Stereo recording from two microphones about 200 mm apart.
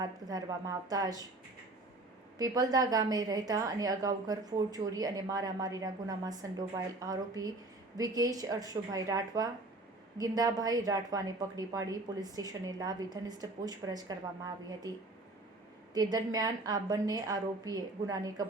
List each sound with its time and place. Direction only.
0.0 s a woman's voice: 20° right (ahead or behind)
2.4 s a woman's voice: 20° right (ahead or behind)
16.0 s a woman's voice: 20° right (ahead or behind)